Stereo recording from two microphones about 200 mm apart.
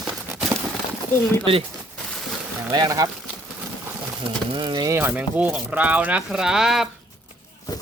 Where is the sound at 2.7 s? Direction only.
20° right (ahead or behind).